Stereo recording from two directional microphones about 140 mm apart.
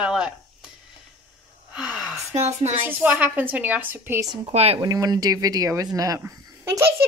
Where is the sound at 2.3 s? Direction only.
50° right (ahead or behind).